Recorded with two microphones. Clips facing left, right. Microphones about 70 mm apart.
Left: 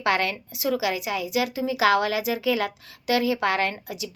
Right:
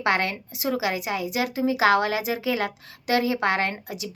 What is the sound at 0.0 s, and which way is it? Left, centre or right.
A woman's voice, right.